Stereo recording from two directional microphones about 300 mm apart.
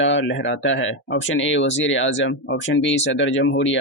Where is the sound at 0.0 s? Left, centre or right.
Left.